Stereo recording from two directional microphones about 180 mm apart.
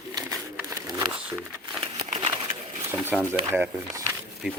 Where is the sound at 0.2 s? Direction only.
20° right (ahead or behind).